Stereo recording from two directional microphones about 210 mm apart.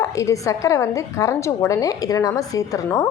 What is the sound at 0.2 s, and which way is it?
A woman's voice, 15° left (ahead or behind).